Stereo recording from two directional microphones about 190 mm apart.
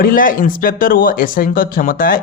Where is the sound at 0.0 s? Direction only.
50° left (ahead or behind).